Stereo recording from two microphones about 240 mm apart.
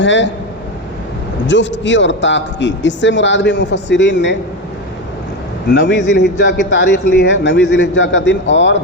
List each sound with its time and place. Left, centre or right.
0.0 s a man's voice: left
1.5 s a man's voice: left
5.7 s a man's voice: left